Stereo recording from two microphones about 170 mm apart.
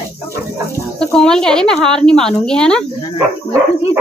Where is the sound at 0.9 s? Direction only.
5° left (ahead or behind).